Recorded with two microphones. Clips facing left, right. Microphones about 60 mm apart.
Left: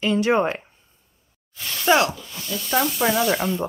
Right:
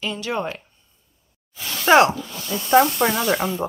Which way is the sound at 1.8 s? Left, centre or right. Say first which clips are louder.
Right 4 dB; right.